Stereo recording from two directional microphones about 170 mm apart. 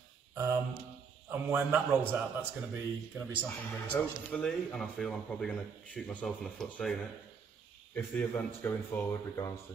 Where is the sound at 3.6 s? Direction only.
10° left (ahead or behind).